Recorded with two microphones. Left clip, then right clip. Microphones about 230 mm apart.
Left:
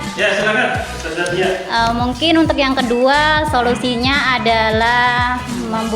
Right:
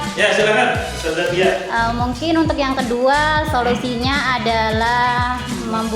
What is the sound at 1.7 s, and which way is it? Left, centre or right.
Music, left.